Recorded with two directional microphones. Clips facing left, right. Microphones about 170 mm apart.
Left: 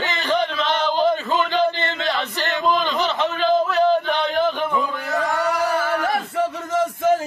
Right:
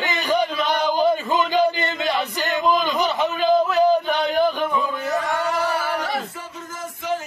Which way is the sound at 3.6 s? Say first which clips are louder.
Right 1 dB; centre (ahead or behind).